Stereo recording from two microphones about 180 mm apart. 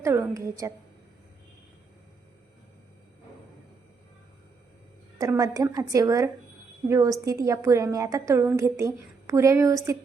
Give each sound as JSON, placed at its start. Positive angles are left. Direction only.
{"t": 0.0, "sound": "a woman's voice", "side_deg": -15}
{"t": 5.1, "sound": "a woman's voice", "side_deg": -15}